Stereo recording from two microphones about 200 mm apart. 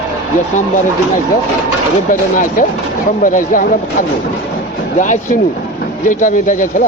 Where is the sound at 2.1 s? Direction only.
40° left (ahead or behind).